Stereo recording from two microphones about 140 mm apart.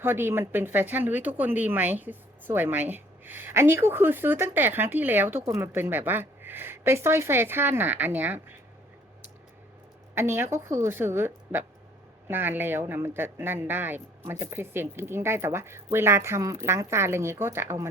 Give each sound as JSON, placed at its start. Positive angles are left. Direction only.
{"t": 0.0, "sound": "speech", "side_deg": -15}
{"t": 10.2, "sound": "speech", "side_deg": -15}